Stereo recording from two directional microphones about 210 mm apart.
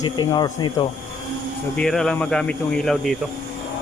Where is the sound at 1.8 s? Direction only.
5° left (ahead or behind).